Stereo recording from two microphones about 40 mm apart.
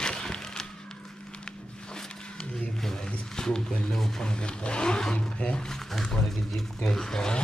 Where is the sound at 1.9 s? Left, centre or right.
Left.